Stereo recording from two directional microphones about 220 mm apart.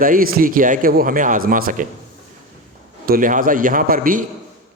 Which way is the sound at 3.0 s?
40° right (ahead or behind).